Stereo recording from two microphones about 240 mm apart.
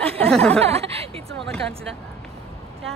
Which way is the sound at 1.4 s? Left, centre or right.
Centre.